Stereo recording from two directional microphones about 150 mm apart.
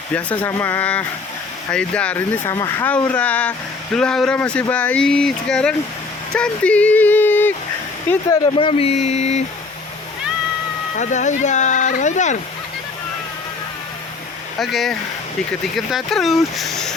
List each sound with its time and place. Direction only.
0.1 s speech: 10° left (ahead or behind)
8.5 s speech: 40° left (ahead or behind)
10.9 s speech: 55° left (ahead or behind)
14.6 s speech: centre (ahead or behind)